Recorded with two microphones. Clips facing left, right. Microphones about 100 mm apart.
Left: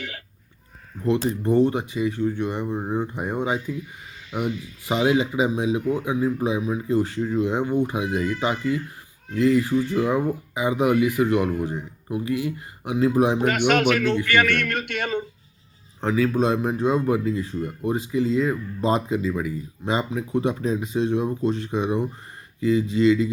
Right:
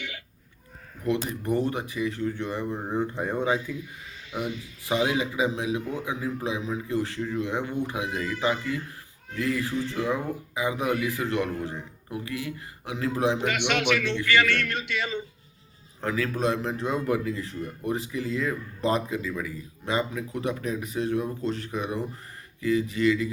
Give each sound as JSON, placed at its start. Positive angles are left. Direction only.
{"t": 1.0, "sound": "speech", "side_deg": 25}
{"t": 4.9, "sound": "speech", "side_deg": 20}
{"t": 13.4, "sound": "a man's voice", "side_deg": 45}
{"t": 16.0, "sound": "speech", "side_deg": 20}